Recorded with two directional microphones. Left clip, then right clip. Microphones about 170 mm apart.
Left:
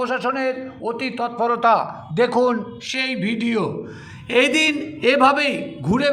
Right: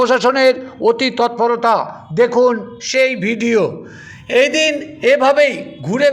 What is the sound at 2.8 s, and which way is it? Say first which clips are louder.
Speech: right 10 dB; 25° right (ahead or behind).